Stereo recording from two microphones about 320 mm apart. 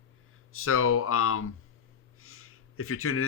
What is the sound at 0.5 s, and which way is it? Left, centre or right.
Speech, left.